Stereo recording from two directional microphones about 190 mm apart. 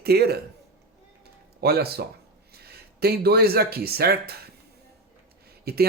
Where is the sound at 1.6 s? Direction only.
55° right (ahead or behind).